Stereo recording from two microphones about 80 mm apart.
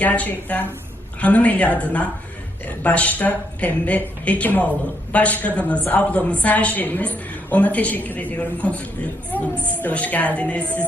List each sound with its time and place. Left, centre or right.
0.0 s a woman's voice: centre